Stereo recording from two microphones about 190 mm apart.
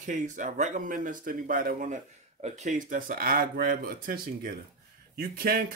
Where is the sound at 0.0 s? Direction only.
40° right (ahead or behind).